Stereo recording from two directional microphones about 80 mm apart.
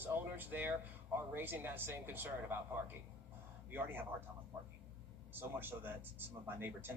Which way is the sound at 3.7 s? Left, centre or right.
Right.